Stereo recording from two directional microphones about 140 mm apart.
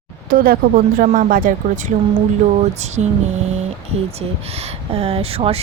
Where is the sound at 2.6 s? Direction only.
55° right (ahead or behind).